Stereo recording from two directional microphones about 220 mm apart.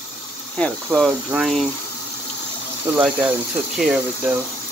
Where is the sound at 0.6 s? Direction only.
5° left (ahead or behind).